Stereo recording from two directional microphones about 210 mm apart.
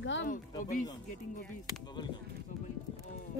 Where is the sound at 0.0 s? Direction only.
60° left (ahead or behind).